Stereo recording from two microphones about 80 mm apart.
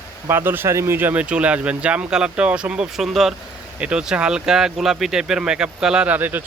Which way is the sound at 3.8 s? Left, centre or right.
Centre.